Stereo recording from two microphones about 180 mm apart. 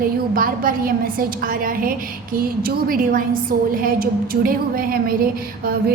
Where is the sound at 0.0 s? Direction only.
50° right (ahead or behind).